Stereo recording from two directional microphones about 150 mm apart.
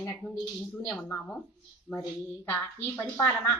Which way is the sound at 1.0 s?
10° left (ahead or behind).